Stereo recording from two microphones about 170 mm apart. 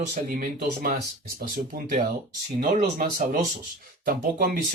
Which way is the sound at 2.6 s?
50° right (ahead or behind).